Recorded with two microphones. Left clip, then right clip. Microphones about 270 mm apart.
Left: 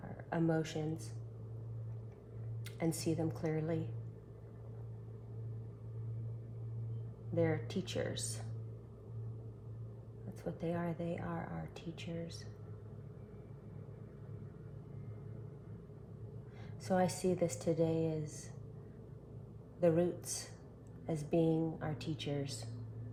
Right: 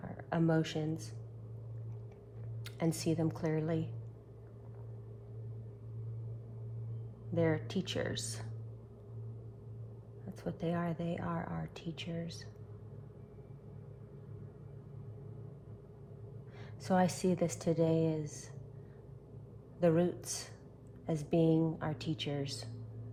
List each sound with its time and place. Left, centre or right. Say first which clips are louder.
0.3 s speech: right 3 dB; right
2.6 s speech: right 2 dB; right
7.3 s speech: right 2 dB; right
10.4 s speech: right 2 dB; right
16.8 s speech: right 2 dB; right
19.8 s speech: right 1 dB; right